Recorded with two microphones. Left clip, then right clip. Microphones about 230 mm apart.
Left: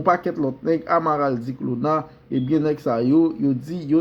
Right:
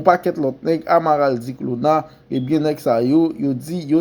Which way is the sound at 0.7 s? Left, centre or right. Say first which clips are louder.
Right 4 dB; right.